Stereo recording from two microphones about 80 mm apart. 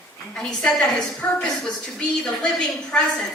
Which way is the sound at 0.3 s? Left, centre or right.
Centre.